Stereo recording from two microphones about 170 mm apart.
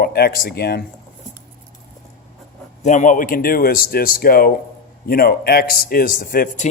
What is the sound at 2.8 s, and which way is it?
A man's voice, 45° left (ahead or behind).